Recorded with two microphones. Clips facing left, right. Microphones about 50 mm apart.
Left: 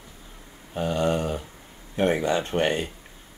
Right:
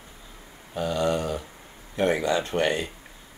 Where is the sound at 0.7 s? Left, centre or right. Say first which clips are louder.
Left 1 dB; left.